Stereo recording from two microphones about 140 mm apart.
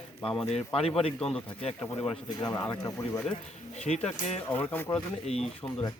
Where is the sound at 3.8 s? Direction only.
50° left (ahead or behind).